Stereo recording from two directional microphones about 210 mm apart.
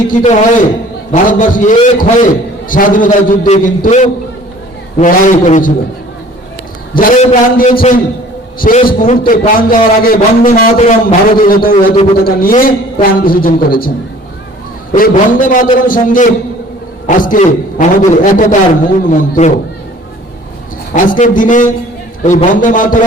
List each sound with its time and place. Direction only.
0.1 s a man's voice: 35° left (ahead or behind)
6.9 s a man's voice: 45° left (ahead or behind)
14.9 s a man's voice: 40° left (ahead or behind)
20.9 s a man's voice: 40° left (ahead or behind)